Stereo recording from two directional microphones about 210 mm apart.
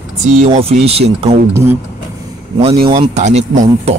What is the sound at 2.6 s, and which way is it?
Speech, 25° right (ahead or behind).